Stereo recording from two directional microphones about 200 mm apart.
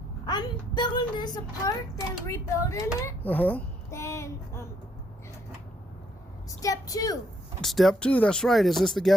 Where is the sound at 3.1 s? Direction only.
10° left (ahead or behind).